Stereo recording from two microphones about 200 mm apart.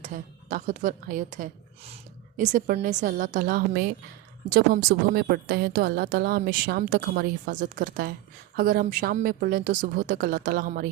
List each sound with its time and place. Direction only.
0.0 s a woman's voice: 40° right (ahead or behind)